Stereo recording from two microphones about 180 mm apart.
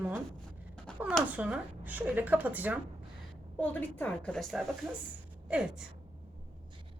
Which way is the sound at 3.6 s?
10° left (ahead or behind).